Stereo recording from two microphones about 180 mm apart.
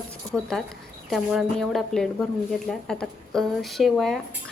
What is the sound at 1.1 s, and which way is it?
A woman's voice, centre (ahead or behind).